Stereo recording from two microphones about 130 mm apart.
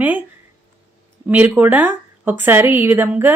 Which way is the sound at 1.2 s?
15° right (ahead or behind).